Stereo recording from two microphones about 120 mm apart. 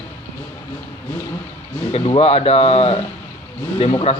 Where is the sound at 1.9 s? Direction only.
55° left (ahead or behind).